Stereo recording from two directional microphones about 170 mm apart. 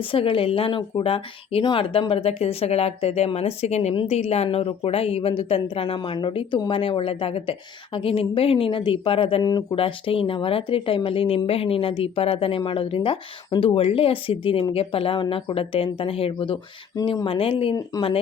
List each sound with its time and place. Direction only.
0.0 s speech: 30° left (ahead or behind)
16.9 s speech: 20° left (ahead or behind)